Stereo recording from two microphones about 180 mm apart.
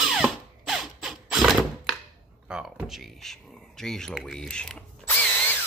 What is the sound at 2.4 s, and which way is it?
Speech, 5° right (ahead or behind).